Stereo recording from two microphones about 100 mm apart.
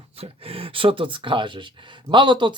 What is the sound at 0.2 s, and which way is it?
Speech, 70° right (ahead or behind).